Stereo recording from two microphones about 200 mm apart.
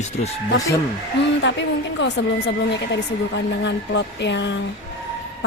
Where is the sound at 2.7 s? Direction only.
60° left (ahead or behind).